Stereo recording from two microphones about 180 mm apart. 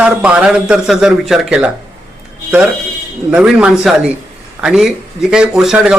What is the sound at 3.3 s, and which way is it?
Speech, 5° right (ahead or behind).